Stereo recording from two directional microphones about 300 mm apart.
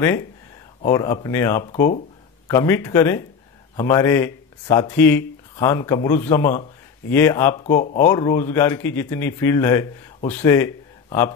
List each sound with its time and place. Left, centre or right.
0.8 s a man's voice: centre
7.6 s speech: left
8.0 s a man's voice: centre